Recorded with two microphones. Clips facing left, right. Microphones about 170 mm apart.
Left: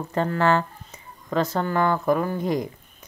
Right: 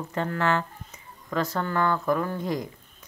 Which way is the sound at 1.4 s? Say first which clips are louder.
Left 3 dB; 20° left (ahead or behind).